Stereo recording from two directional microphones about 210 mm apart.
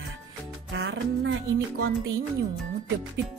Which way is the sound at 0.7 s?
55° right (ahead or behind).